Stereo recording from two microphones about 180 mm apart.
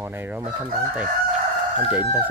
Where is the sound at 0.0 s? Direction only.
10° right (ahead or behind).